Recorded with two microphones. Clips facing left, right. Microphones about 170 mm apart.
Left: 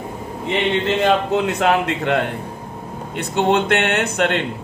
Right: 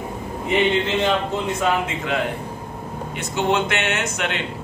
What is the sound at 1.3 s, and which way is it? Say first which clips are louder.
A man's voice: left 4 dB; 75° left (ahead or behind).